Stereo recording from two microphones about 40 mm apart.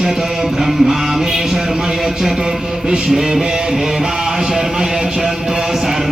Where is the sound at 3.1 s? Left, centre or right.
Centre.